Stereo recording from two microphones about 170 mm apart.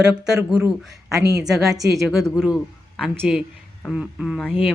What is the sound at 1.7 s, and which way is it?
Speech, 20° right (ahead or behind).